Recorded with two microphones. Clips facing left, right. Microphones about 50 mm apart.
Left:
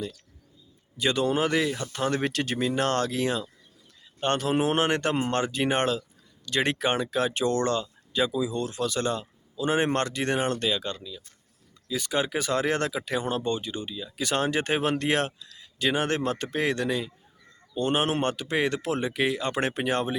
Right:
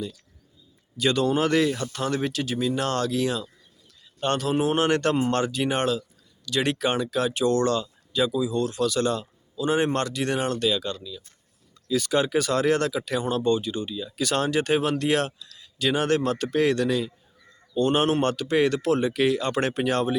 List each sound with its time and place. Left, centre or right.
0.9 s speech: left
1.8 s speech: left
2.0 s speech: left
2.3 s speech: left
2.6 s speech: left
4.9 s speech: left